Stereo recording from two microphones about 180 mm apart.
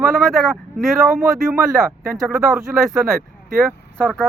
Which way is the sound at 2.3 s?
15° right (ahead or behind).